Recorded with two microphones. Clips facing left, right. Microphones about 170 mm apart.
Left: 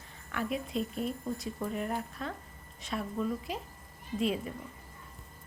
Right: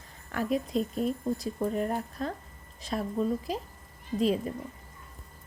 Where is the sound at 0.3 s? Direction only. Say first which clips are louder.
Right 5 dB; 40° right (ahead or behind).